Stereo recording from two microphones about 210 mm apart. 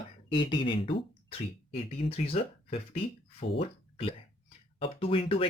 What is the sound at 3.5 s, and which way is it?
Speech, 25° left (ahead or behind).